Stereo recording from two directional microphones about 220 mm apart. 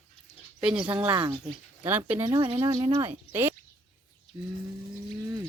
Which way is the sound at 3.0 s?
10° right (ahead or behind).